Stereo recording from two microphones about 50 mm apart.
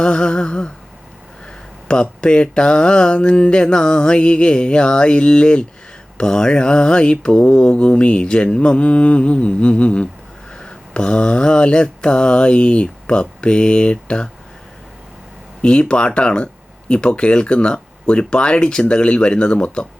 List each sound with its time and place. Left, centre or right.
0.0 s a sound: centre
1.9 s mantra: centre
15.6 s mantra: centre